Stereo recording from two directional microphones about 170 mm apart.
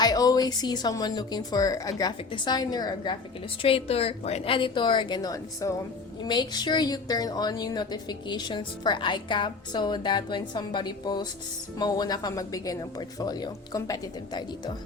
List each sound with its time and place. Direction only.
0.0 s a woman's voice: 20° left (ahead or behind)